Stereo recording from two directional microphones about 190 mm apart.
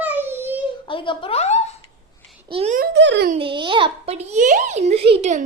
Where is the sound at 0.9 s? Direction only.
25° left (ahead or behind).